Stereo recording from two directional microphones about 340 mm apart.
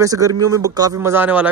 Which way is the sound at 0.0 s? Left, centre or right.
Centre.